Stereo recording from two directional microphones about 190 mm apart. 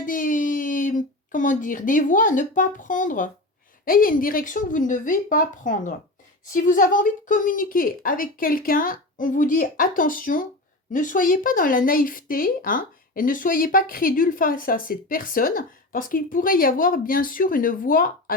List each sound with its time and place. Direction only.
0.0 s speech: 45° left (ahead or behind)